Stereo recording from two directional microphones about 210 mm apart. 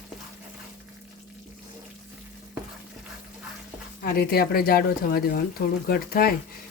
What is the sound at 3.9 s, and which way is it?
Speech, 45° left (ahead or behind).